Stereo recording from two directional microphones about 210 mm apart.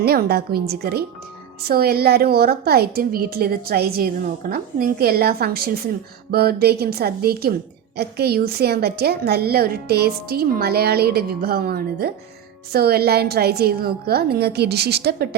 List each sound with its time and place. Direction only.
0.0 s a woman's voice: 50° right (ahead or behind)